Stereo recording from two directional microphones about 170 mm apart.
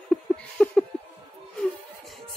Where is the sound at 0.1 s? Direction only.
5° left (ahead or behind).